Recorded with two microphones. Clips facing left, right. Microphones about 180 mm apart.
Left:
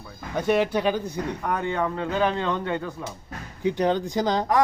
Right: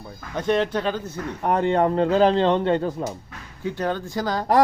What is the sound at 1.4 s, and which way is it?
A man's voice, 30° right (ahead or behind).